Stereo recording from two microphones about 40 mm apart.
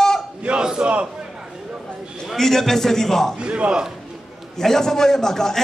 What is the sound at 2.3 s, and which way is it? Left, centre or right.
A man's voice, centre.